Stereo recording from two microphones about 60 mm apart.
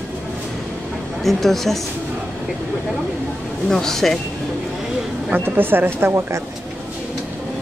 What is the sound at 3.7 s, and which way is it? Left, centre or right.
Speech, centre.